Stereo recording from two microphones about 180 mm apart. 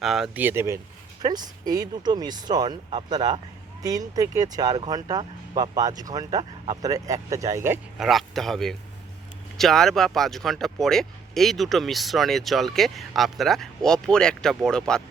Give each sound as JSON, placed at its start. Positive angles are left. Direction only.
{"t": 0.0, "sound": "speech", "side_deg": 0}
{"t": 7.9, "sound": "speech", "side_deg": 0}